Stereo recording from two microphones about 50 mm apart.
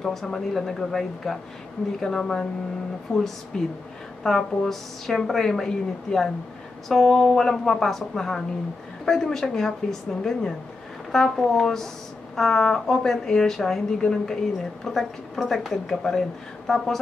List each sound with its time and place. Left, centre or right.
0.0 s speech: centre